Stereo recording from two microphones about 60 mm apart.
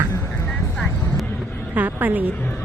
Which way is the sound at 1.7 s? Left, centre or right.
Right.